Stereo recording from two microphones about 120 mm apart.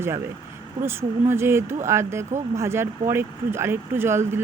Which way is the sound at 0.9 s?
20° right (ahead or behind).